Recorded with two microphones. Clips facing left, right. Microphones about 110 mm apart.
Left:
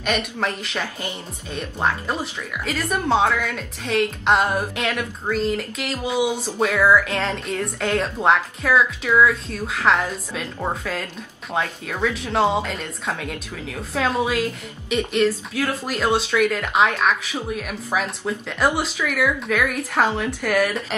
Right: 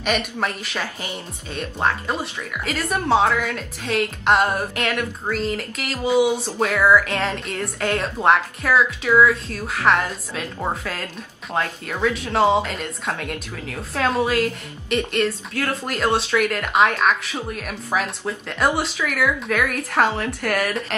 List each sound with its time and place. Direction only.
0.0 s speech: 5° right (ahead or behind)